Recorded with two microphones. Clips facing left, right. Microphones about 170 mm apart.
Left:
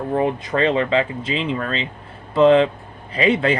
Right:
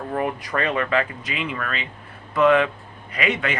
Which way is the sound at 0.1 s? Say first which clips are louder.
Left 5 dB; 25° left (ahead or behind).